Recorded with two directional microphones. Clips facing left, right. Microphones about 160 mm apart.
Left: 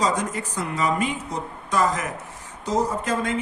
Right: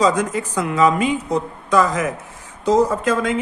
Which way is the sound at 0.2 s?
90° right.